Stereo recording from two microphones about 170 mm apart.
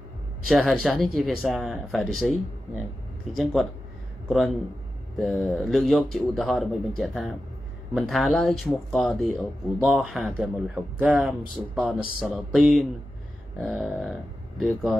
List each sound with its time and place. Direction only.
0.5 s speech: centre (ahead or behind)
4.3 s speech: centre (ahead or behind)